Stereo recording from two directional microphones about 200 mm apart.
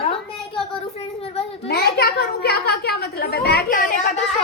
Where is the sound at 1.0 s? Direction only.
30° left (ahead or behind).